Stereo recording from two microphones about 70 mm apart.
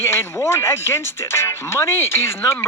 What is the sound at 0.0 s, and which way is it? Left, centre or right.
Speech, left.